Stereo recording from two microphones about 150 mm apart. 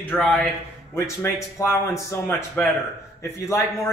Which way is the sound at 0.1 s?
10° left (ahead or behind).